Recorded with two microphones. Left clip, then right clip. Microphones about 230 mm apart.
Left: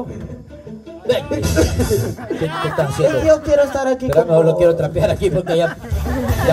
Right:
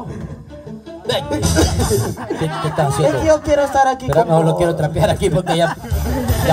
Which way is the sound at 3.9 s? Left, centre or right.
Right.